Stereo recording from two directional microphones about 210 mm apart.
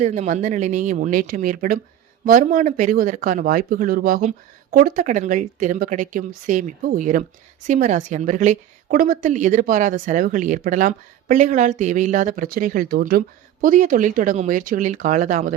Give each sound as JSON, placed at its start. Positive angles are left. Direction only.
{"t": 0.0, "sound": "a woman's voice", "side_deg": -35}